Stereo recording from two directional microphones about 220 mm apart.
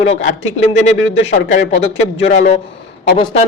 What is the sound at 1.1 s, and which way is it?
Speech, 30° left (ahead or behind).